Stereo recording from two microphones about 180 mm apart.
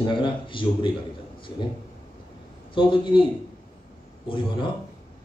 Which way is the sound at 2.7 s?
25° left (ahead or behind).